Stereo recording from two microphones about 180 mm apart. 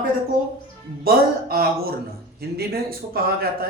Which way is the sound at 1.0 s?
55° right (ahead or behind).